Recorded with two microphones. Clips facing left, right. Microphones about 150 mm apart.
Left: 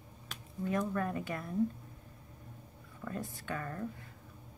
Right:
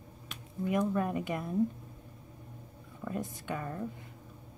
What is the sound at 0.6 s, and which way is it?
Speech, 15° right (ahead or behind).